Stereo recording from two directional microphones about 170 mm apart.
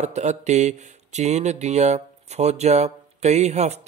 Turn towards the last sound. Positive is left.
turn(degrees=-40)  # may be behind; listen again after turning